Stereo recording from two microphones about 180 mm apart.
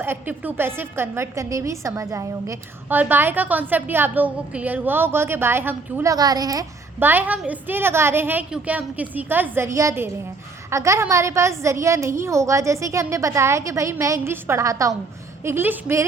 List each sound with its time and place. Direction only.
0.0 s a woman's voice: 10° right (ahead or behind)